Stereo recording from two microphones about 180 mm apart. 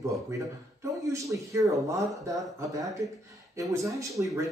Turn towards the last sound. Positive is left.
turn(degrees=-20)  # may be behind; listen again after turning